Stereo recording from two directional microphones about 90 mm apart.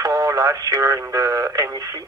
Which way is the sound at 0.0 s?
35° right (ahead or behind).